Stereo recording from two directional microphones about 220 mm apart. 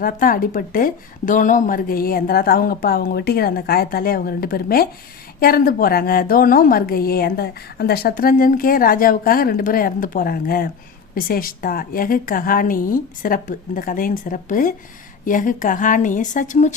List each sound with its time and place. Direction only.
0.0 s a woman's voice: 40° left (ahead or behind)